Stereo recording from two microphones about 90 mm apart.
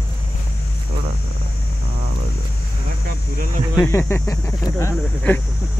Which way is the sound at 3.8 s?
25° left (ahead or behind).